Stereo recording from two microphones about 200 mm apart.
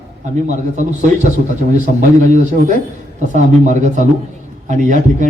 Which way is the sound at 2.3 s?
40° right (ahead or behind).